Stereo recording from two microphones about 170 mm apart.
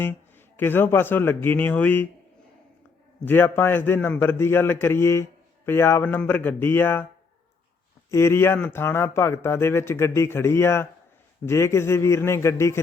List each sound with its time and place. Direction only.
0.0 s speech: 10° left (ahead or behind)
3.2 s speech: 15° left (ahead or behind)
8.1 s speech: 15° left (ahead or behind)